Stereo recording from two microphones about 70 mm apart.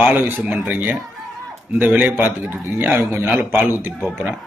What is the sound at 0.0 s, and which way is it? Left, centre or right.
A man's voice, centre.